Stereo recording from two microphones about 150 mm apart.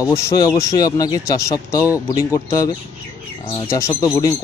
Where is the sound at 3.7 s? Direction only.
20° left (ahead or behind).